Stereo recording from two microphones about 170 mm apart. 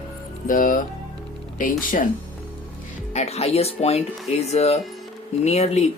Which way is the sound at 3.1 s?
40° left (ahead or behind).